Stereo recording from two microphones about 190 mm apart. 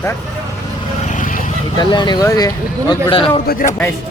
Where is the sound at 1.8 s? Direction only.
20° left (ahead or behind).